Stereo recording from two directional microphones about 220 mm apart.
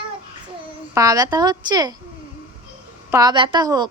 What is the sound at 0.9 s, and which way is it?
Speech, 15° right (ahead or behind).